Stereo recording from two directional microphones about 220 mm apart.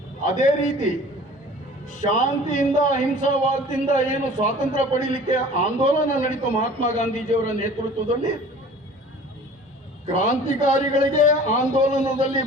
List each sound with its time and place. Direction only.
0.3 s a man's voice: 35° left (ahead or behind)
10.1 s a man's voice: 35° left (ahead or behind)